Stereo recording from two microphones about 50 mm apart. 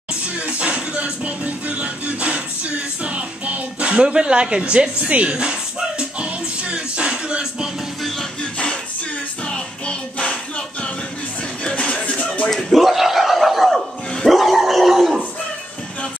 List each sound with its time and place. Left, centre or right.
0.2 s music: right
8.4 s music: left
11.6 s a sound: left
12.4 s speech: centre
12.8 s a sound: centre
14.3 s dog: centre